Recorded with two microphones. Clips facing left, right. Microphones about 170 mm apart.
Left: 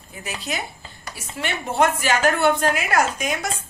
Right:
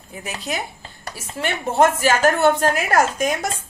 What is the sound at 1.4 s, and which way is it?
A woman's voice, 45° right (ahead or behind).